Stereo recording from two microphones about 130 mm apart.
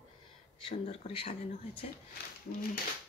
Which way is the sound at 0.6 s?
45° left (ahead or behind).